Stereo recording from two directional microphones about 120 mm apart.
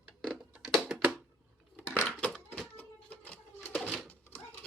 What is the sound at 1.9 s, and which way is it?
Crushing, 10° left (ahead or behind).